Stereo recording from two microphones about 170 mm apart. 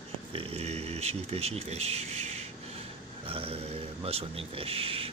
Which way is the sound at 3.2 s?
35° right (ahead or behind).